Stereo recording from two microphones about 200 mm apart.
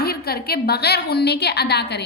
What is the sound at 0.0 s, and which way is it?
A woman's voice, 50° left (ahead or behind).